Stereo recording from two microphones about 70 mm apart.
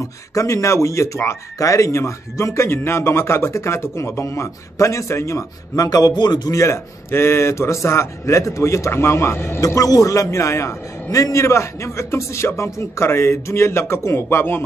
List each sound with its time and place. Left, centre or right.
0.0 s speech: left
5.9 s a man's voice: left
6.5 s a man's voice: left
9.6 s speech: left